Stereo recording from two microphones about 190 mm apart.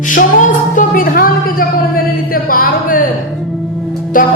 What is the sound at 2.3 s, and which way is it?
Speech, 50° left (ahead or behind).